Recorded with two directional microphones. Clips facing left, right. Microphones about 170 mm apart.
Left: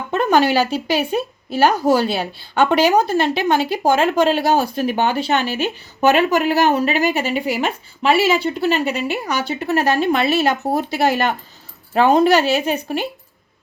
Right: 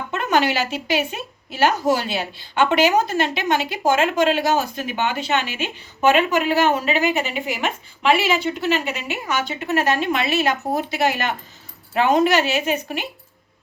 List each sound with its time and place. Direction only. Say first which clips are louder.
0.1 s speech: left 5 dB; 35° left (ahead or behind)